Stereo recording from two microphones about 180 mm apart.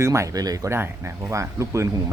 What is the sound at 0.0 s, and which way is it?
A man's voice, 15° right (ahead or behind).